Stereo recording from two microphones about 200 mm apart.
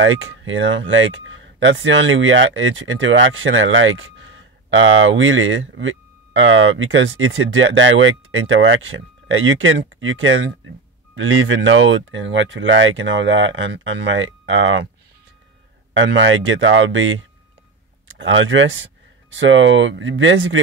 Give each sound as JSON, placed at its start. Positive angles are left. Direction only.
{"t": 0.0, "sound": "speech", "side_deg": -75}
{"t": 15.9, "sound": "speech", "side_deg": -70}